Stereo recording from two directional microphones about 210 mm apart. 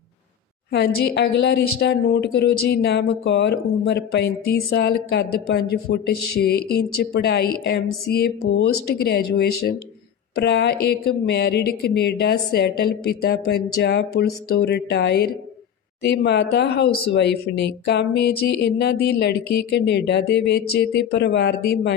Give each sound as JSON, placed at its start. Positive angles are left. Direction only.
{"t": 0.7, "sound": "a woman's voice", "side_deg": 55}